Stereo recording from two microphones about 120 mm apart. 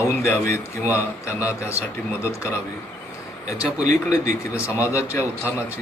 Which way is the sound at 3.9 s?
90° right.